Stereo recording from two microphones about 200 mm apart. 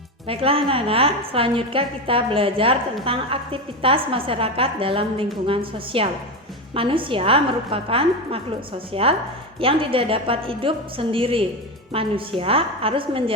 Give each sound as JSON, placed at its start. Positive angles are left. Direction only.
{"t": 0.3, "sound": "a woman's voice", "side_deg": -30}